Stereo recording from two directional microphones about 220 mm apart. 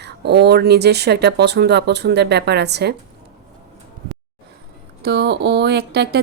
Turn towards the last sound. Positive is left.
turn(degrees=-50)  # may be behind; listen again after turning